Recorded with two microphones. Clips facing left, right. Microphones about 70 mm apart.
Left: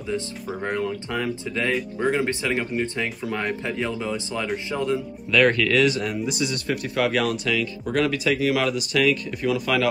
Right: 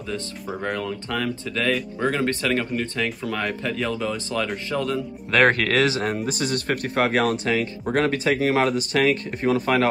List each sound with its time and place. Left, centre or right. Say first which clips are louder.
0.7 s speech: left 1 dB; centre
1.7 s speech: even; centre
5.3 s speech: even; right